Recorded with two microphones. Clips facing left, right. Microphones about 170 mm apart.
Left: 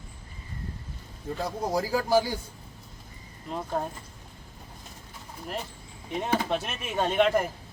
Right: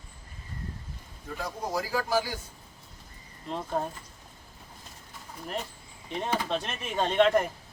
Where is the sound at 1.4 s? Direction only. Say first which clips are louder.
Left 4 dB; 30° left (ahead or behind).